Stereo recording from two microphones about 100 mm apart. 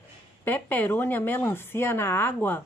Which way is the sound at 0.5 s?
20° left (ahead or behind).